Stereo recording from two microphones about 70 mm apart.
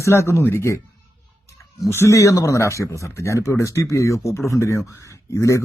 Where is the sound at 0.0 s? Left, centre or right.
Left.